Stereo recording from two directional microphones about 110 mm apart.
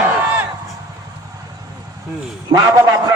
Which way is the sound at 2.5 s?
30° right (ahead or behind).